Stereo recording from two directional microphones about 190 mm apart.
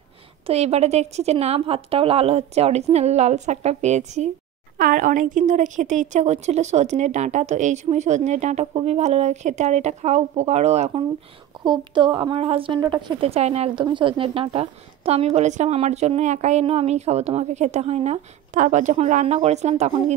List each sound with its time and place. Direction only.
0.5 s speech: 35° right (ahead or behind)
4.7 s speech: 45° right (ahead or behind)
11.6 s a woman's voice: 25° right (ahead or behind)